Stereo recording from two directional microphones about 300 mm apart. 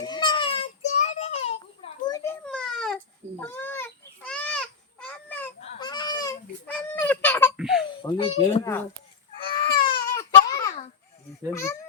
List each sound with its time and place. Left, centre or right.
0.0 s a sound: centre
2.0 s a sound: centre
5.5 s fowl: centre
7.5 s baby laughter: centre
8.1 s speech: centre
9.6 s baby cry: centre
11.5 s a child's voice: centre